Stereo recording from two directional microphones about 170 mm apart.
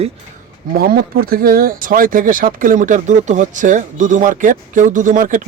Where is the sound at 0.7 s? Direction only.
60° right (ahead or behind).